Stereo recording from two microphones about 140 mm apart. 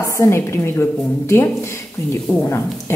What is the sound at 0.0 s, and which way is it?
A woman's voice, 20° left (ahead or behind).